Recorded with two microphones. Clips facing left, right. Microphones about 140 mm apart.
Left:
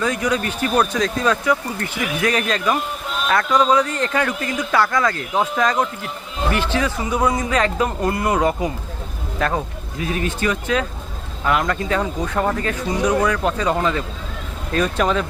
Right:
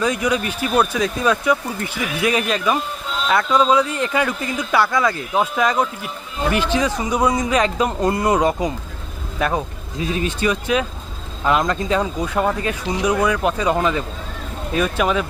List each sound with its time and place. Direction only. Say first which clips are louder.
0.0 s speech: right 1 dB; 15° right (ahead or behind)